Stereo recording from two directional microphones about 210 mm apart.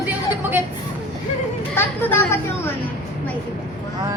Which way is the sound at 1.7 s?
10° left (ahead or behind).